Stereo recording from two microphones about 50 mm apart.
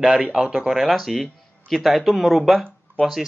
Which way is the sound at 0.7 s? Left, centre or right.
Centre.